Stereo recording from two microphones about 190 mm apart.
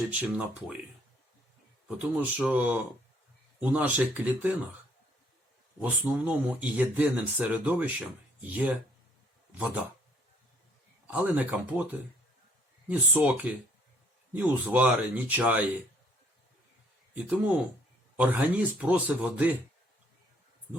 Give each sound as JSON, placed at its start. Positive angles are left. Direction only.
{"t": 0.1, "sound": "speech", "side_deg": -5}
{"t": 1.9, "sound": "speech", "side_deg": -5}
{"t": 5.8, "sound": "speech", "side_deg": -10}
{"t": 11.0, "sound": "speech", "side_deg": -10}
{"t": 17.2, "sound": "speech", "side_deg": -10}